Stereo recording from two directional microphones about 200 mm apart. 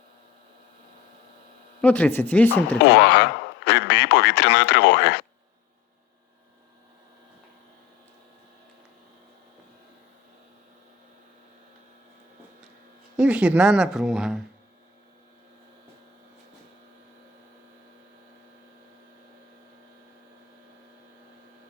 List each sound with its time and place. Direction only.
1.8 s speech: 5° left (ahead or behind)
2.8 s a man's voice: 55° left (ahead or behind)
13.1 s speech: 5° right (ahead or behind)